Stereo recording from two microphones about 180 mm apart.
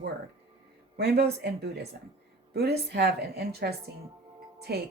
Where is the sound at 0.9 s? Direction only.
65° right (ahead or behind).